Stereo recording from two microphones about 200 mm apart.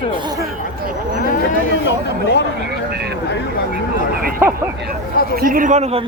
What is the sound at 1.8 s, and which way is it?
Speech, 60° left (ahead or behind).